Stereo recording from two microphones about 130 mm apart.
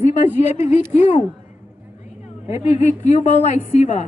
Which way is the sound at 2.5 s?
60° left (ahead or behind).